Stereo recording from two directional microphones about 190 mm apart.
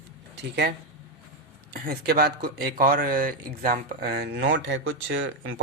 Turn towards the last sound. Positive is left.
turn(degrees=-90)